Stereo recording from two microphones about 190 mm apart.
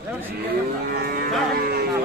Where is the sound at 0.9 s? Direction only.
55° right (ahead or behind).